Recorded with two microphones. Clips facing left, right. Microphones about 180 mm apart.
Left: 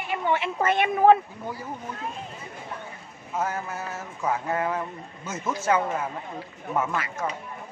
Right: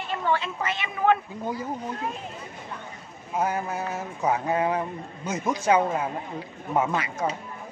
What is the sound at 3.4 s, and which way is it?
Speech, 15° right (ahead or behind).